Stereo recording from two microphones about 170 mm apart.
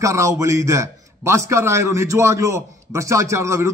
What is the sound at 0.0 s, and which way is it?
A man's voice, 20° right (ahead or behind).